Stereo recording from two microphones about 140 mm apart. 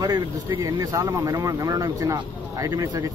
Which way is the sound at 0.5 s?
25° right (ahead or behind).